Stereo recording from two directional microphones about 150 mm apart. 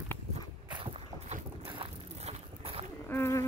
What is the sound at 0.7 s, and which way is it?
Boat, 40° right (ahead or behind).